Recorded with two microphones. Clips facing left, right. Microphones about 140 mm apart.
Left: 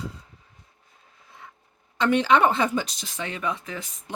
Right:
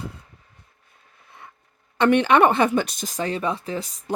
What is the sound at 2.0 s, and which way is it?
Speech, 60° right (ahead or behind).